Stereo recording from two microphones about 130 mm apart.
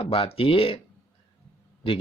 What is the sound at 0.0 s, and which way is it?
Speech, 45° left (ahead or behind).